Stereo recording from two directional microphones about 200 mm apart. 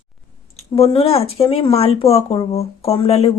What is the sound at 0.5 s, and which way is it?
Speech, 30° left (ahead or behind).